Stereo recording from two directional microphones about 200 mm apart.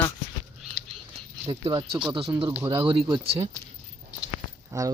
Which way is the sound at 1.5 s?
20° right (ahead or behind).